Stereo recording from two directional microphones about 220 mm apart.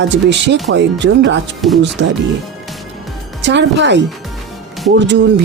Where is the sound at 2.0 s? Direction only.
55° right (ahead or behind).